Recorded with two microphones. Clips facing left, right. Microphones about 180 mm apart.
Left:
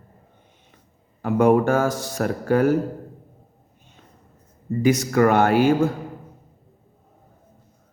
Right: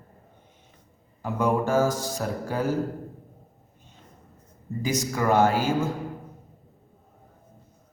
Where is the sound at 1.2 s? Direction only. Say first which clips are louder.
Left 7 dB; 60° left (ahead or behind).